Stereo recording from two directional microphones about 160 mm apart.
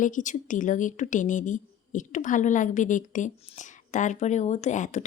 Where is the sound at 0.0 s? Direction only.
55° left (ahead or behind).